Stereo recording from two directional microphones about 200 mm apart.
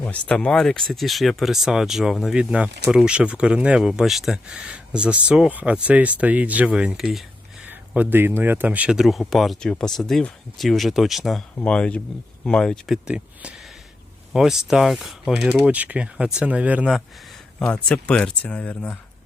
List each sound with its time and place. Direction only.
0.0 s speech: 5° left (ahead or behind)